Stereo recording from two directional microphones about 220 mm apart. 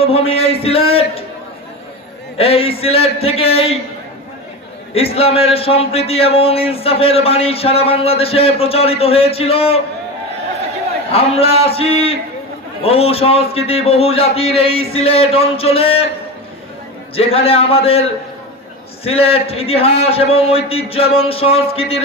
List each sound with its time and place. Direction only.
0.0 s a man's voice: 25° left (ahead or behind)
2.3 s a man's voice: 25° left (ahead or behind)
4.9 s a man's voice: 25° left (ahead or behind)
11.1 s a man's voice: 25° left (ahead or behind)
17.1 s a man's voice: 25° left (ahead or behind)
19.0 s a man's voice: 25° left (ahead or behind)